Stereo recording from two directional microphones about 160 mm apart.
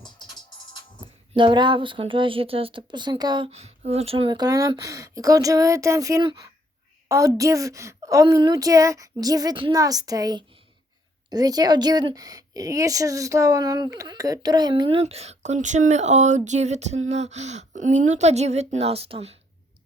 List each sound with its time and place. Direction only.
1.0 s a woman's voice: 35° right (ahead or behind)
3.5 s a woman's voice: 40° right (ahead or behind)